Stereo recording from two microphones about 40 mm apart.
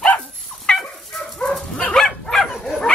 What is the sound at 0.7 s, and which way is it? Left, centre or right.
Dog, left.